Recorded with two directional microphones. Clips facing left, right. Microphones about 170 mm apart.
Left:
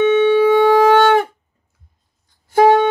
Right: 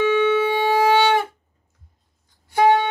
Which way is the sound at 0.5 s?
50° left (ahead or behind).